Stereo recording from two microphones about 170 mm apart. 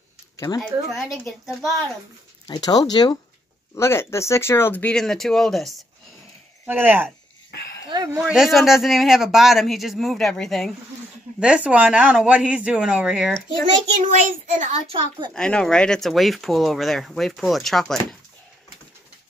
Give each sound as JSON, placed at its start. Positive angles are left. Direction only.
{"t": 0.6, "sound": "speech", "side_deg": 0}
{"t": 2.4, "sound": "speech", "side_deg": 20}
{"t": 6.6, "sound": "speech", "side_deg": -10}
{"t": 7.9, "sound": "a sound", "side_deg": -25}
{"t": 8.2, "sound": "speech", "side_deg": -5}
{"t": 13.9, "sound": "a child's voice", "side_deg": -50}
{"t": 15.3, "sound": "speech", "side_deg": 5}